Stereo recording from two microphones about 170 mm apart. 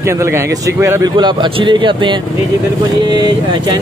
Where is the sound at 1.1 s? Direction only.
30° right (ahead or behind).